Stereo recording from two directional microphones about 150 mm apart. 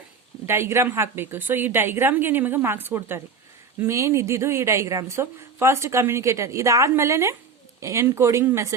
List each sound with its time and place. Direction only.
0.4 s a woman's voice: 15° right (ahead or behind)